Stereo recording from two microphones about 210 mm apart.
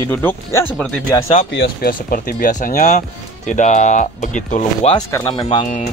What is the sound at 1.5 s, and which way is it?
Speech, 45° left (ahead or behind).